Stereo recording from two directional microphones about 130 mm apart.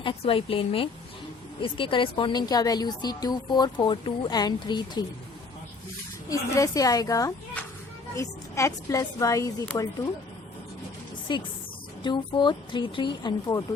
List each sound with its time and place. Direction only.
0.0 s a woman's voice: 40° left (ahead or behind)
6.2 s a woman's voice: 25° left (ahead or behind)
11.3 s a woman's voice: 35° left (ahead or behind)